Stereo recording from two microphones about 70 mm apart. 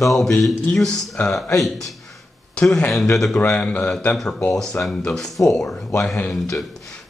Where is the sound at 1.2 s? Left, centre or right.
Left.